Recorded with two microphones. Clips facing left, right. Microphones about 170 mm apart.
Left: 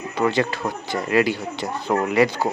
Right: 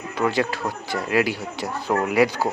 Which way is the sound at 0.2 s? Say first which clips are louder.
Left 1 dB; 5° right (ahead or behind).